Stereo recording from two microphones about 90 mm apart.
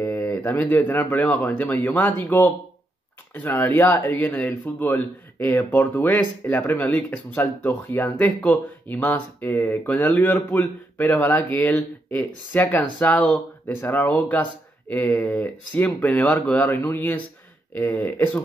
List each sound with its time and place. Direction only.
0.4 s speech: 20° left (ahead or behind)